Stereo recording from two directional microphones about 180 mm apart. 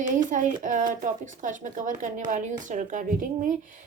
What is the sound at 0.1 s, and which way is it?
A woman's voice, 45° right (ahead or behind).